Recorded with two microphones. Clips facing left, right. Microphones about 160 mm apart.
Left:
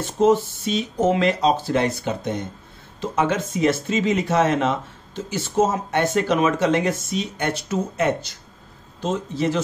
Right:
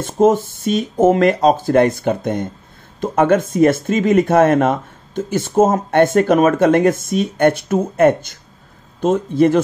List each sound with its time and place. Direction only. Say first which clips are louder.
0.0 s speech: right 4 dB; 50° right (ahead or behind)